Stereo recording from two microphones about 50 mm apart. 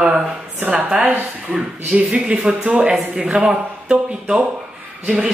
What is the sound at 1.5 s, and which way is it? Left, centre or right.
A man's voice, centre.